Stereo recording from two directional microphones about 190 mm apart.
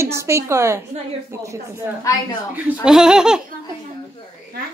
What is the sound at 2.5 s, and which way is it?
Speech, 5° right (ahead or behind).